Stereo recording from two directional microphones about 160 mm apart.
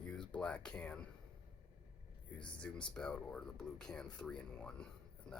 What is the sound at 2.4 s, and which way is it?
Speech, 5° left (ahead or behind).